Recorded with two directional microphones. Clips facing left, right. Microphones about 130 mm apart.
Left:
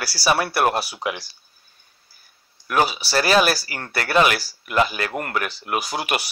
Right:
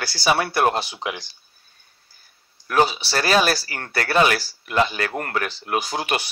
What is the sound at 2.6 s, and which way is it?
Speech, 30° right (ahead or behind).